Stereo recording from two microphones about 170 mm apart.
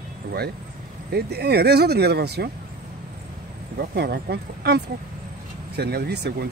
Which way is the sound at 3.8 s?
70° right (ahead or behind).